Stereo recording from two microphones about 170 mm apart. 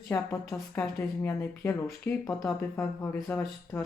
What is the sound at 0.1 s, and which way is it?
Speech, 10° left (ahead or behind).